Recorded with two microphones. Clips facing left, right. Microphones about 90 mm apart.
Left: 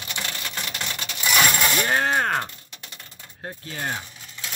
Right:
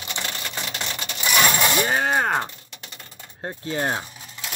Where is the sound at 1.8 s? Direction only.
5° right (ahead or behind).